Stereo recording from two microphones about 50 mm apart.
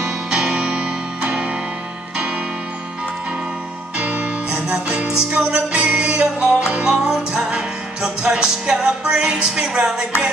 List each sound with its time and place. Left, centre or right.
0.0 s music: centre
4.0 s music: right